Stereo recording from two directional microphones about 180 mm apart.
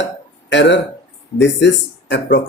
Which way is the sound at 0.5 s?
80° left.